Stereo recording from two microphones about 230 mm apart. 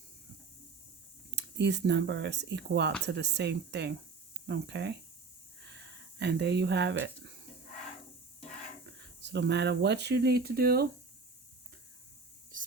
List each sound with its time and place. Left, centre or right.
1.4 s speech: right
9.2 s speech: right